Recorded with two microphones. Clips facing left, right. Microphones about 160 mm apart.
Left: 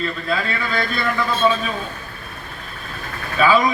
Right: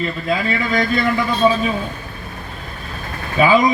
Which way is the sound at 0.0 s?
15° right (ahead or behind).